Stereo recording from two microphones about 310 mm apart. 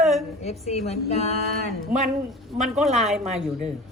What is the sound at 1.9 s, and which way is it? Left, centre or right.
A woman's voice, centre.